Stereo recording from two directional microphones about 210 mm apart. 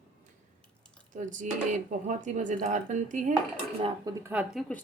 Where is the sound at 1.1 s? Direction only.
35° right (ahead or behind).